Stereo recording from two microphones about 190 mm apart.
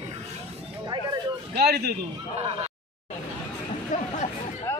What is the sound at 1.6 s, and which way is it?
Speech, 55° right (ahead or behind).